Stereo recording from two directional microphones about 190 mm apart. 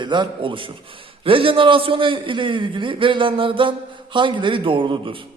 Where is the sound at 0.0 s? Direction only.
25° right (ahead or behind).